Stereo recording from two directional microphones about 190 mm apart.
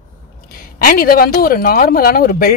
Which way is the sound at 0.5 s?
50° left (ahead or behind).